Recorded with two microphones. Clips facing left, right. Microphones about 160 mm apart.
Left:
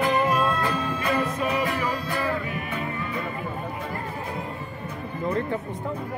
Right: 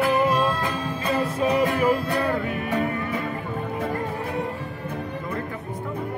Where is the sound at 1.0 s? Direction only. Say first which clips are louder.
Right 4 dB; 40° right (ahead or behind); by 3.1 s 75° right (ahead or behind).